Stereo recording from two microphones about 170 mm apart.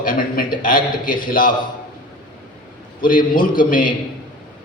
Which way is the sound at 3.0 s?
55° left (ahead or behind).